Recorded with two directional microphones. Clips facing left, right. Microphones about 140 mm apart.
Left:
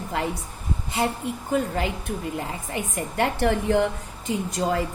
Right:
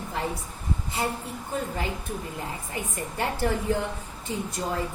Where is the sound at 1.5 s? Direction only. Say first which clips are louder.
Left 5 dB; 75° left (ahead or behind).